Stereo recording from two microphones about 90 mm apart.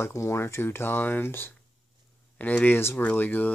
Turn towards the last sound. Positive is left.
turn(degrees=20)  # may be behind; listen again after turning